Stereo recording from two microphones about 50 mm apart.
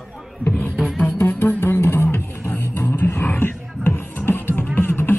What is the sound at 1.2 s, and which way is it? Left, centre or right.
Music, left.